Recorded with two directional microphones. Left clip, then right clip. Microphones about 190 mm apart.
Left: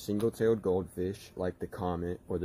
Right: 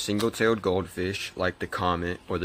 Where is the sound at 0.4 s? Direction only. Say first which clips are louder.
Right 4 dB; 20° right (ahead or behind).